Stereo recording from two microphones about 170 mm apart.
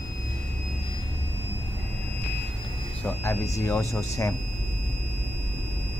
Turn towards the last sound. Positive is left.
turn(degrees=15)  # may be behind; listen again after turning